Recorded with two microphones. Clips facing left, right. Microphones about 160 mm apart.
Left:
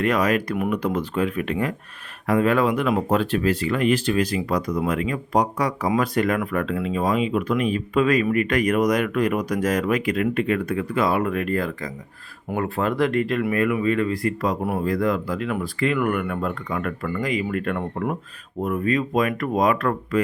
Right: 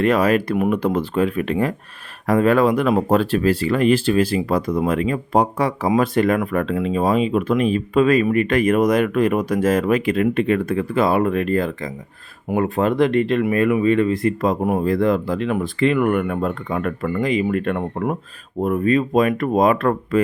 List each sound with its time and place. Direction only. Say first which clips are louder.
0.0 s speech: right 4 dB; 30° right (ahead or behind)